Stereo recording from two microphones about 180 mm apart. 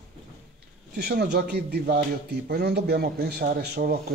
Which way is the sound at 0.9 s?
65° right (ahead or behind).